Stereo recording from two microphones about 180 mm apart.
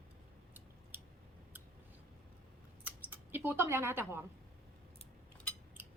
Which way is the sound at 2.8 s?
10° right (ahead or behind).